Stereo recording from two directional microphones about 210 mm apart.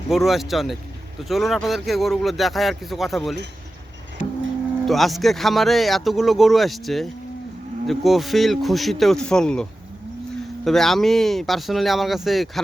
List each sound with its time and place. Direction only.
0.1 s speech: centre (ahead or behind)
4.9 s speech: centre (ahead or behind)